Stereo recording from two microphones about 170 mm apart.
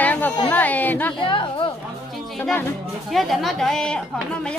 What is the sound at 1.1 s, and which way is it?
Speech, 30° left (ahead or behind).